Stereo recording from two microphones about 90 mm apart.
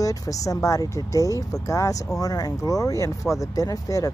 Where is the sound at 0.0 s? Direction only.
40° left (ahead or behind).